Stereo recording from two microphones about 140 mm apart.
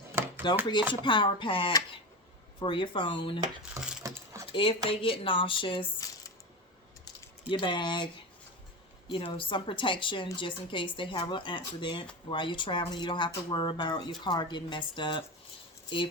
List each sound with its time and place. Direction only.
0.4 s speech: 30° left (ahead or behind)
4.0 s a sound: 20° right (ahead or behind)
4.5 s speech: 40° left (ahead or behind)
7.5 s speech: 35° left (ahead or behind)